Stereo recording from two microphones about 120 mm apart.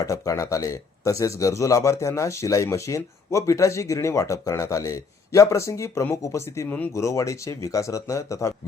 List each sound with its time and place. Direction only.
0.0 s speech: 25° left (ahead or behind)